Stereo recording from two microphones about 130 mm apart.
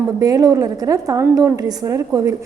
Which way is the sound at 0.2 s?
30° right (ahead or behind).